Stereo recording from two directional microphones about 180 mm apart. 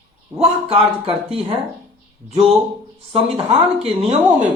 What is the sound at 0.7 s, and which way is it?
Speech, 30° right (ahead or behind).